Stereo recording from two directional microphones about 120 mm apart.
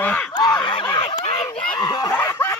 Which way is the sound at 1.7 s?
35° left (ahead or behind).